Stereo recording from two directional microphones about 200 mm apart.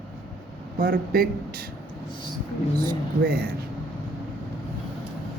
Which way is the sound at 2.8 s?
45° right (ahead or behind).